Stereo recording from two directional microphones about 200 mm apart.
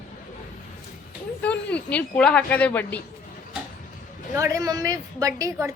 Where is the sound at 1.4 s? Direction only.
5° left (ahead or behind).